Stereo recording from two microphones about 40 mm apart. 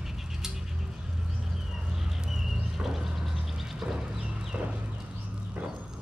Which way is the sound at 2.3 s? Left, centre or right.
Centre.